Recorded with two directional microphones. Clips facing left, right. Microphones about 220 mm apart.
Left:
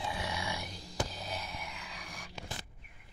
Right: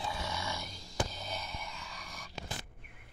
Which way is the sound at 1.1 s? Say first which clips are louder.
Left 1 dB; centre (ahead or behind).